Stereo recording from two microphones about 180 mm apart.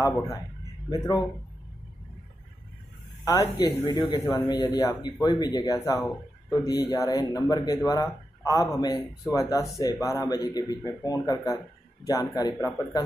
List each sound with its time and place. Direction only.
0.0 s a man's voice: 15° left (ahead or behind)
3.3 s a man's voice: 20° left (ahead or behind)